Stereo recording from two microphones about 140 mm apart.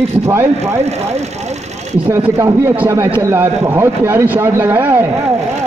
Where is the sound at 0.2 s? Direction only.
15° right (ahead or behind).